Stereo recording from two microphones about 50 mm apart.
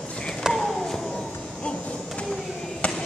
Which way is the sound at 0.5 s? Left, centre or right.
Centre.